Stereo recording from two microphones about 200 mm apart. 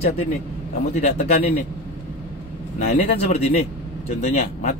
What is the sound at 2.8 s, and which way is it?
Speech, 35° left (ahead or behind).